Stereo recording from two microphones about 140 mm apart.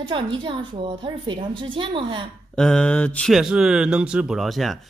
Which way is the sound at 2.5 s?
5° left (ahead or behind).